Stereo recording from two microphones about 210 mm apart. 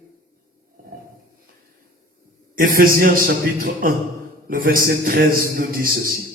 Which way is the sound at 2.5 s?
45° right (ahead or behind).